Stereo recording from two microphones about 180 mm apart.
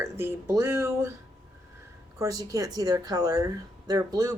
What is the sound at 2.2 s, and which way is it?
A woman's voice, 20° right (ahead or behind).